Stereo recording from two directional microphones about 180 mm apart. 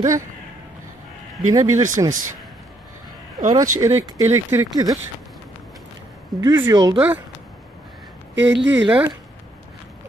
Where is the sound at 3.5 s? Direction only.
15° right (ahead or behind).